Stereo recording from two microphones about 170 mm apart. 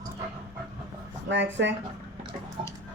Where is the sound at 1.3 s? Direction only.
90° right.